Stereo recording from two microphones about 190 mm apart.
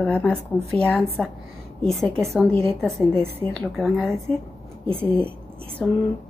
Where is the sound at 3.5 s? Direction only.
Centre (ahead or behind).